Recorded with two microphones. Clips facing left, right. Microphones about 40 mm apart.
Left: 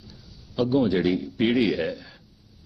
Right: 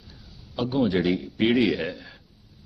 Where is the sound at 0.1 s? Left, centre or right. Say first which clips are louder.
Even; right.